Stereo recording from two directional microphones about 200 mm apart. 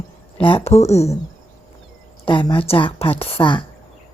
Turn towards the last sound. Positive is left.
turn(degrees=25)  # may be behind; listen again after turning